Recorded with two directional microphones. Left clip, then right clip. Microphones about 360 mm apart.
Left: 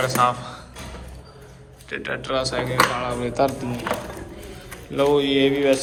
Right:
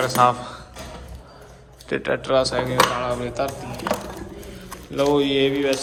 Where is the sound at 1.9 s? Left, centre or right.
Centre.